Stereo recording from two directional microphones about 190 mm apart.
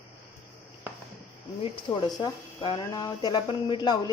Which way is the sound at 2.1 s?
20° left (ahead or behind).